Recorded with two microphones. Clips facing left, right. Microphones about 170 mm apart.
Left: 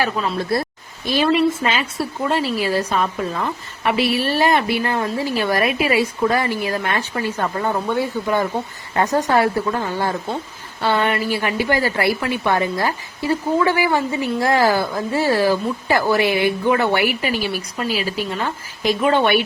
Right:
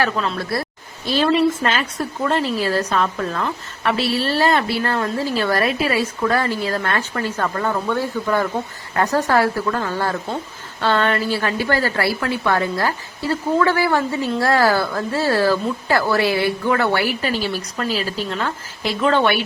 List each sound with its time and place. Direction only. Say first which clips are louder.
1.0 s a woman's voice: even; 15° left (ahead or behind)